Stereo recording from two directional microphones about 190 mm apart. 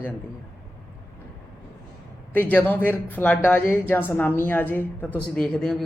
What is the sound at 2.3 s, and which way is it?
A woman's voice, 10° left (ahead or behind).